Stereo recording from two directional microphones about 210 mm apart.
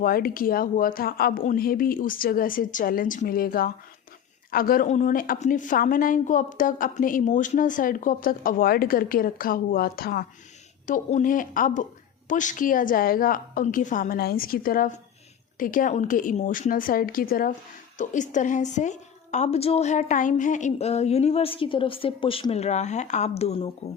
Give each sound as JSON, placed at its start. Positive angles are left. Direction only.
{"t": 0.0, "sound": "a woman's voice", "side_deg": 45}